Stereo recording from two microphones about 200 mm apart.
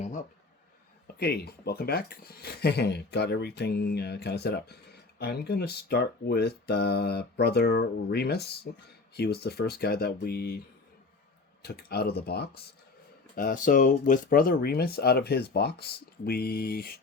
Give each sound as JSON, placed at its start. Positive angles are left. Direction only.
{"t": 0.0, "sound": "a sound", "side_deg": 35}
{"t": 1.0, "sound": "speech", "side_deg": 55}
{"t": 11.6, "sound": "speech", "side_deg": 50}